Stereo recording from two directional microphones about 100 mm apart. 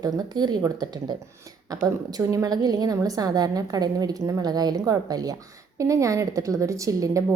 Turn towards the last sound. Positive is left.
turn(degrees=-35)  # may be behind; listen again after turning